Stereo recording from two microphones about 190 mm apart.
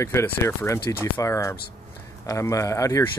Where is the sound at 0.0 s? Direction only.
15° left (ahead or behind).